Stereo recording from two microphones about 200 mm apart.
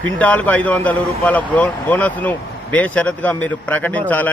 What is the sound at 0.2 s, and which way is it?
A man's voice, 10° left (ahead or behind).